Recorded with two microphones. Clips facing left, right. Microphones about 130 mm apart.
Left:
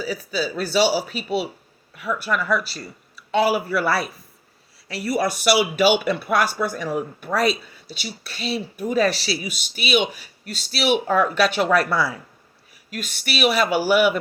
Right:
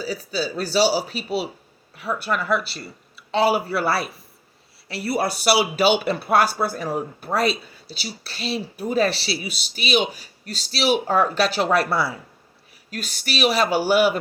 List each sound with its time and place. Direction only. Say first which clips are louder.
0.0 s a man's voice: left 1 dB; 30° right (ahead or behind)